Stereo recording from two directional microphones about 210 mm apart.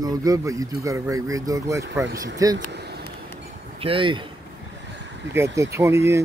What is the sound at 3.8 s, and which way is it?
Speech, 25° right (ahead or behind).